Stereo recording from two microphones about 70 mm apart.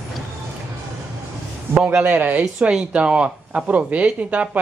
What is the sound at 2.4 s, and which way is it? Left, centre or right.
Speech, centre.